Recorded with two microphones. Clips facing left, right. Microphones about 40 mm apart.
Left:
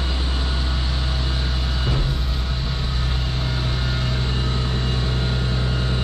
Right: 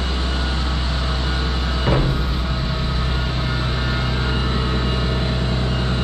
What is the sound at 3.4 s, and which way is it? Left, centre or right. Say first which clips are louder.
Vehicle: right 3 dB; centre.